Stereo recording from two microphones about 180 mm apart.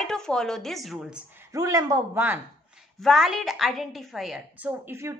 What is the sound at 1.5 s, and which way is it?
Speech, 20° right (ahead or behind).